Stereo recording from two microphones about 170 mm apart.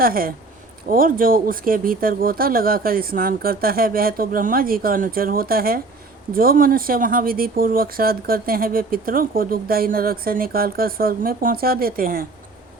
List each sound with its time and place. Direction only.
0.0 s speech: 60° right (ahead or behind)